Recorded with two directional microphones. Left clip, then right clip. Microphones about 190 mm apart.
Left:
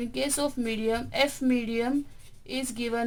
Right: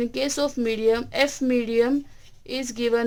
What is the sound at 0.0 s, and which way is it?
A woman's voice, 45° right (ahead or behind).